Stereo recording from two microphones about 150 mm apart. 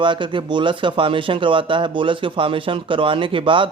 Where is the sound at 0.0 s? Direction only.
35° right (ahead or behind).